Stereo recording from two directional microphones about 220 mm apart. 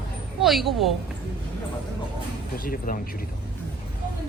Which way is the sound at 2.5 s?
40° left (ahead or behind).